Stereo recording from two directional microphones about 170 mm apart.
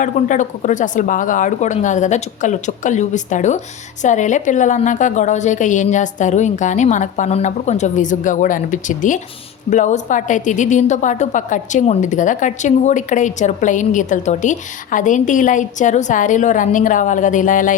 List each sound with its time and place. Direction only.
0.0 s a woman's voice: 50° left (ahead or behind)